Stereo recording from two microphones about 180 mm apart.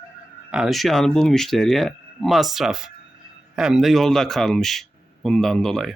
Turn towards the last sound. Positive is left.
turn(degrees=0)  # may be behind; listen again after turning